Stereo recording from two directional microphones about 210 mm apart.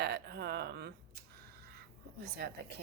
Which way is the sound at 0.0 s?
50° right (ahead or behind).